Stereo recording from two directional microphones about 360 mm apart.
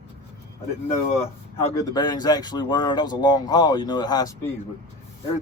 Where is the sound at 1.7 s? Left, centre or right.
Centre.